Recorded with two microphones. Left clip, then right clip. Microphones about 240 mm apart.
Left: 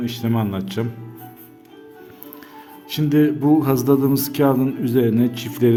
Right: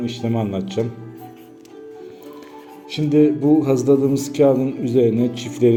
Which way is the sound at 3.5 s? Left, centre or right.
Left.